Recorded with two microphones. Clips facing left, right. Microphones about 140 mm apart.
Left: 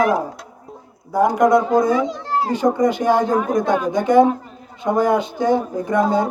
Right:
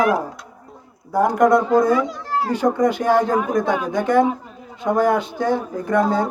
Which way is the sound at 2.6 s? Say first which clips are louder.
Left 1 dB; 10° right (ahead or behind).